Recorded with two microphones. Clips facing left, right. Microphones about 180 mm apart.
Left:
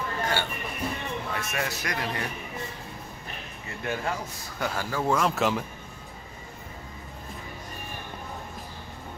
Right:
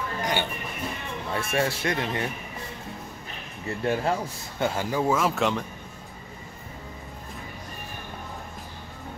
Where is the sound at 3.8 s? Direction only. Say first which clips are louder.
Right 5 dB; 30° right (ahead or behind).